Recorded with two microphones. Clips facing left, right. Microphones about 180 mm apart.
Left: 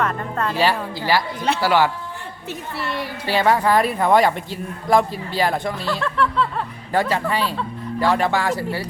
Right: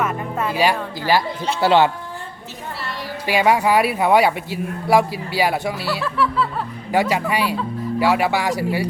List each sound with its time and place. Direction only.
0.0 s music: 10° right (ahead or behind)
1.6 s speech: 25° right (ahead or behind)
3.2 s a man's voice: 10° right (ahead or behind)